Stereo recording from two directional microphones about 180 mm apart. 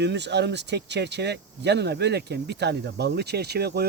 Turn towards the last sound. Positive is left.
turn(degrees=-60)  # may be behind; listen again after turning